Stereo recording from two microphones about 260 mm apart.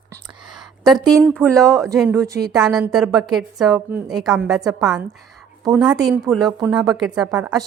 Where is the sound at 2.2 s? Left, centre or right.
Centre.